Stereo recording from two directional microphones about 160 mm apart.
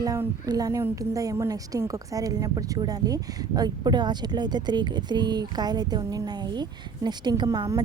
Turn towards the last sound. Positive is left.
turn(degrees=-25)  # may be behind; listen again after turning